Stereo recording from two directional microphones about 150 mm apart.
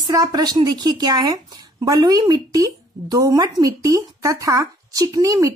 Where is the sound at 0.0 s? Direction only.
25° right (ahead or behind).